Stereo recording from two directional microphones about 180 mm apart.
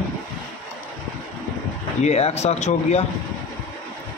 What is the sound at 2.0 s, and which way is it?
Speech, 35° left (ahead or behind).